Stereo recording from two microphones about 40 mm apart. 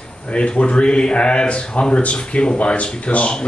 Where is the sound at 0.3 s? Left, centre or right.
Left.